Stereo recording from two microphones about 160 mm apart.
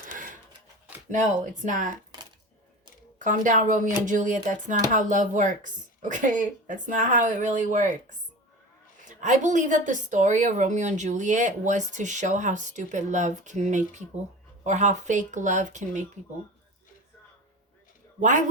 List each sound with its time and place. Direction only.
0.1 s a sound: 55° right (ahead or behind)
1.6 s a woman's voice: 55° right (ahead or behind)
3.2 s a woman's voice: 55° right (ahead or behind)
9.0 s a woman's voice: 50° right (ahead or behind)
18.2 s speech: 50° right (ahead or behind)